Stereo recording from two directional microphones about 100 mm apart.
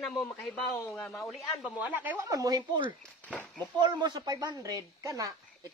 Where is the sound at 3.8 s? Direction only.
45° right (ahead or behind).